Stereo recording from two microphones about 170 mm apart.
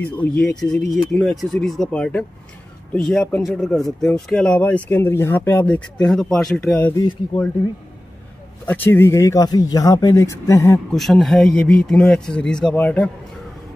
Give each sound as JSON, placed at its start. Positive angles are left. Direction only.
{"t": 0.4, "sound": "speech", "side_deg": 5}
{"t": 7.0, "sound": "speech", "side_deg": 20}
{"t": 8.6, "sound": "speech", "side_deg": 10}
{"t": 10.9, "sound": "speech", "side_deg": 0}